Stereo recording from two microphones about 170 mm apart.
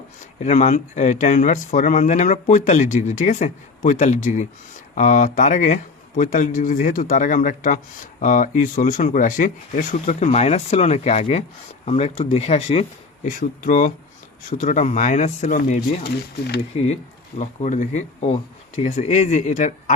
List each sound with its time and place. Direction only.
0.3 s speech: 45° left (ahead or behind)
13.2 s speech: 50° left (ahead or behind)